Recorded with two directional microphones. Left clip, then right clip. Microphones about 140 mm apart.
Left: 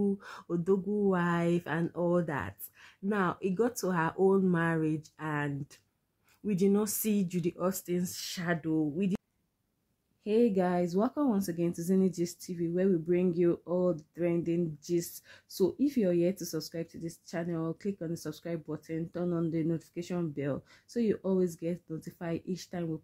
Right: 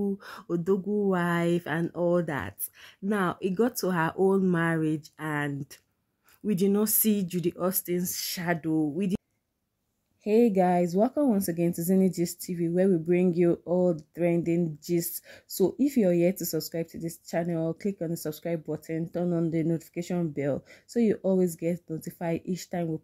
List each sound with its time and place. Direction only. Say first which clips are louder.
0.0 s speech: right 1 dB; 30° right (ahead or behind)
10.2 s speech: right 5 dB; 25° right (ahead or behind)